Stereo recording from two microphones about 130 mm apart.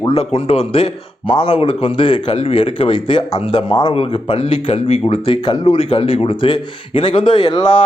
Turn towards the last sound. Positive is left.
turn(degrees=35)  # may be behind; listen again after turning